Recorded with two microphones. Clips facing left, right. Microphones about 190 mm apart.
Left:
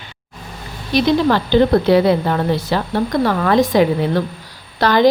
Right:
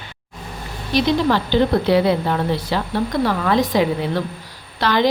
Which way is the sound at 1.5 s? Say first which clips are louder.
Left 5 dB; 50° left (ahead or behind).